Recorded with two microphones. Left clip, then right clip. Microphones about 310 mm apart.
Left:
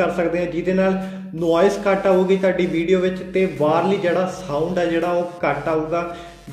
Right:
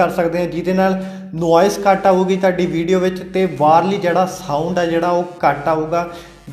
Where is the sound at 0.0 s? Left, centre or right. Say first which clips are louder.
Right 4 dB; right.